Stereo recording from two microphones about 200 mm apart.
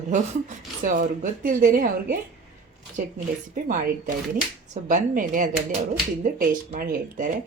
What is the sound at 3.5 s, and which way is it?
Speech, 40° right (ahead or behind).